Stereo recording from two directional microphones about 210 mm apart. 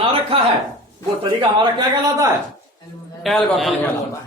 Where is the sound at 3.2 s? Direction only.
Centre (ahead or behind).